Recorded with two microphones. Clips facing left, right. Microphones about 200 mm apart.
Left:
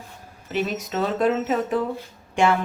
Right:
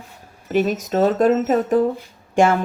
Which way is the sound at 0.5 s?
45° right (ahead or behind).